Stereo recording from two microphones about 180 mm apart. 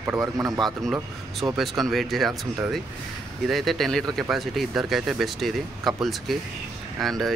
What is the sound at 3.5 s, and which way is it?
Speech, centre (ahead or behind).